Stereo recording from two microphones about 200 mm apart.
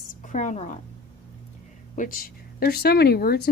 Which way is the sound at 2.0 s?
45° left (ahead or behind).